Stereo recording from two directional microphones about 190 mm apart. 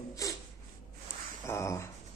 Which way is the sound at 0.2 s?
15° left (ahead or behind).